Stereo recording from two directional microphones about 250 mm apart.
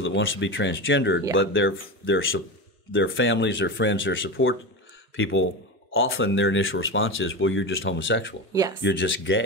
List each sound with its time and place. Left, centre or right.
0.0 s speech: left